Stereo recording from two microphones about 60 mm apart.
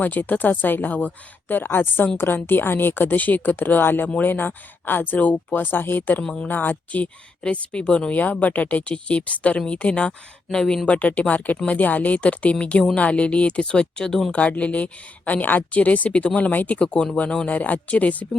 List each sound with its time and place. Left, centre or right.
0.0 s speech: left
6.2 s speech: centre
6.5 s speech: left; by 10.8 s centre
10.8 s speech: left
11.8 s speech: left; by 14.3 s centre
14.3 s speech: left
16.8 s speech: centre